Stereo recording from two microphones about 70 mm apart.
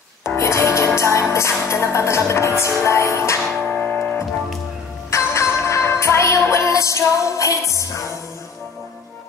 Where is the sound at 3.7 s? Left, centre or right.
Left.